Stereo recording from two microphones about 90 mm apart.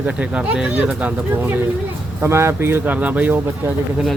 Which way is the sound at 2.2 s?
30° right (ahead or behind).